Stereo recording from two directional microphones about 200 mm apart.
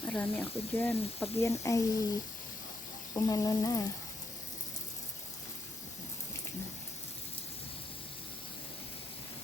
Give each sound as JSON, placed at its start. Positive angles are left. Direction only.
{"t": 0.0, "sound": "speech", "side_deg": 5}
{"t": 3.2, "sound": "speech", "side_deg": 20}